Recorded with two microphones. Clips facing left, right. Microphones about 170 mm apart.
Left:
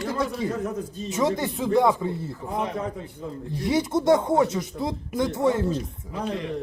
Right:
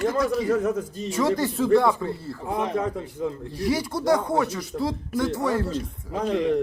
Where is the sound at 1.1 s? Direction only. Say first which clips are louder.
Right 1 dB; 20° left (ahead or behind).